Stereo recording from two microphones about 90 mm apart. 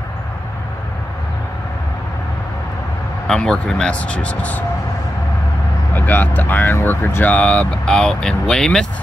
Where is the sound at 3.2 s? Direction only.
5° left (ahead or behind).